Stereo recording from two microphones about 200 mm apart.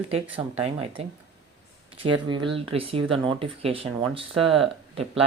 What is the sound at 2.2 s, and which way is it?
Speech, 25° right (ahead or behind).